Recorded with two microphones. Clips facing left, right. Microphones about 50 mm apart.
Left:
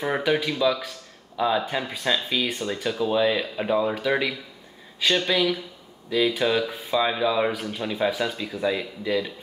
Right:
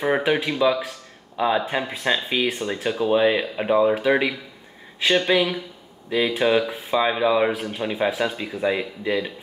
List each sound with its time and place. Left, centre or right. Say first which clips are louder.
0.0 s speech: right 3 dB; right